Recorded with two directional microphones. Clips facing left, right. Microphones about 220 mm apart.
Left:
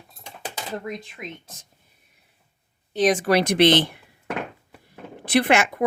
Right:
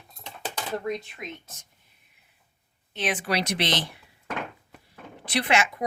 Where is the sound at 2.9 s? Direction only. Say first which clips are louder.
Left 9 dB; 40° left (ahead or behind); by 3.9 s 55° left (ahead or behind).